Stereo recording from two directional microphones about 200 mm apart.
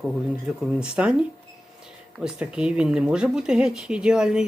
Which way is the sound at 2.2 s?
5° right (ahead or behind).